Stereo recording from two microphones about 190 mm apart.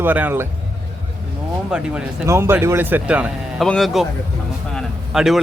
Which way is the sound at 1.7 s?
5° right (ahead or behind).